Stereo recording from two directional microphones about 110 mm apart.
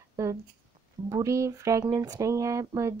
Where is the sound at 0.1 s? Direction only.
30° right (ahead or behind).